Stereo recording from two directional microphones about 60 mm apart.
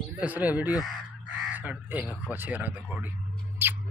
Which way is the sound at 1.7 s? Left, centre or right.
Right.